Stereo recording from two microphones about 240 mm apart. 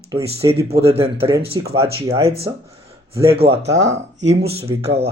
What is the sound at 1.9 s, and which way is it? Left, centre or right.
Speech, right.